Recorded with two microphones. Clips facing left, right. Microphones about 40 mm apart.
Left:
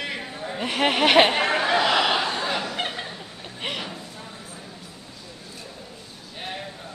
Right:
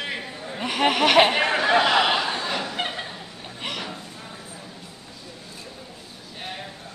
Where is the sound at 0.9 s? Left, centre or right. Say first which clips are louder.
Even; centre.